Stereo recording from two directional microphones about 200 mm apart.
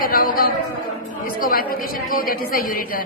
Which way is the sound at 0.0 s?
45° left (ahead or behind).